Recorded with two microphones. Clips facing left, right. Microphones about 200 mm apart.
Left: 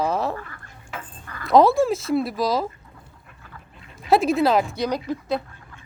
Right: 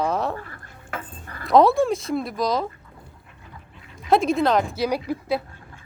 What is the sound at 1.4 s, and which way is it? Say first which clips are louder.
Speech: even; centre (ahead or behind).